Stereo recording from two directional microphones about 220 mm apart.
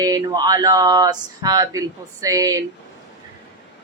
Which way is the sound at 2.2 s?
15° right (ahead or behind).